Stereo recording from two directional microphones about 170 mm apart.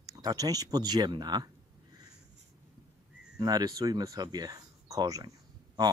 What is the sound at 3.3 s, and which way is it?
Speech, 20° right (ahead or behind).